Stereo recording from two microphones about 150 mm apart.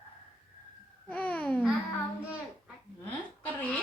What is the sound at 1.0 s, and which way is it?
Babbling, 10° left (ahead or behind).